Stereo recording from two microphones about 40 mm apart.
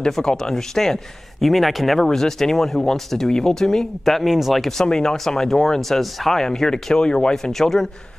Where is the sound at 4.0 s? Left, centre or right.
Centre.